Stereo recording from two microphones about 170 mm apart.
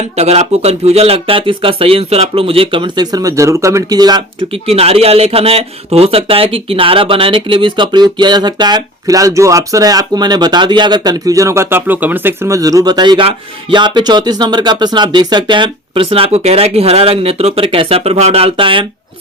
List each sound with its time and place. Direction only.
0.2 s speech: 40° right (ahead or behind); by 4.6 s 25° right (ahead or behind)
4.6 s speech: 35° right (ahead or behind)